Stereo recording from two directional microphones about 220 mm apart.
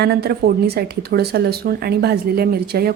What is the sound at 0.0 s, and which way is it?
A woman's voice, 45° right (ahead or behind).